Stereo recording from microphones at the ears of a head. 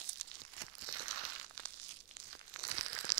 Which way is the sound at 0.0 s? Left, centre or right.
Right.